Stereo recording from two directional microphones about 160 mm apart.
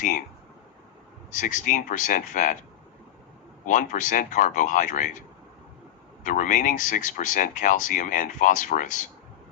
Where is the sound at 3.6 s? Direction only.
55° left (ahead or behind).